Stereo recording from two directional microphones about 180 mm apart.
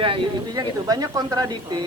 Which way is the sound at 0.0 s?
25° right (ahead or behind).